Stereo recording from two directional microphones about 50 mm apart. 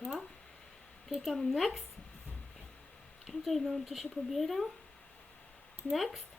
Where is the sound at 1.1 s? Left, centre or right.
Centre.